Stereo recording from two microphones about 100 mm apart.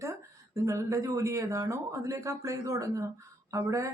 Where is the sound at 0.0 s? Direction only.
30° right (ahead or behind).